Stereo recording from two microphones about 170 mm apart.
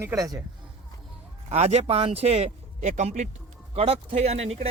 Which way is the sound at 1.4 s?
40° right (ahead or behind).